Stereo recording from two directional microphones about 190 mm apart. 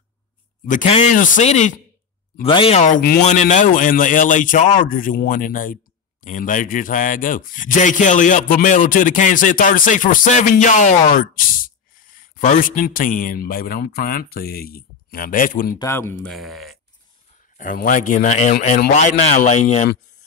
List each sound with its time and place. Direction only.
0.7 s a man's voice: 40° left (ahead or behind)
15.8 s speech: 10° left (ahead or behind)
17.6 s a man's voice: 45° left (ahead or behind)